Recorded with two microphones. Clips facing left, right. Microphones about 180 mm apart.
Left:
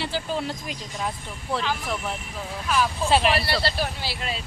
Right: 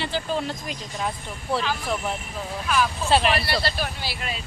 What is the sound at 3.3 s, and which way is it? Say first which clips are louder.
Speech: even; 30° left (ahead or behind).